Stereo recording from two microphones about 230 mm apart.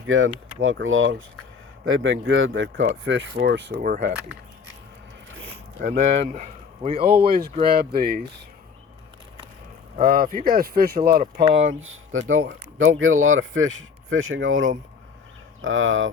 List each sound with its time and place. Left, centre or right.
0.1 s speech: right
3.8 s speech: right
5.4 s a sound: right
7.0 s speech: right
10.0 s speech: right
11.8 s speech: right